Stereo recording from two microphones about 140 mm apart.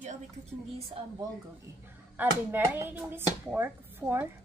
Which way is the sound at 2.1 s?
15° right (ahead or behind).